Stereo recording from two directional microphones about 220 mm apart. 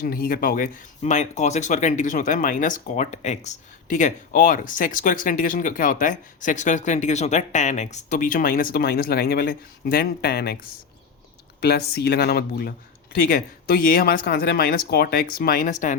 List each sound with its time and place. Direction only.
0.0 s speech: 40° left (ahead or behind)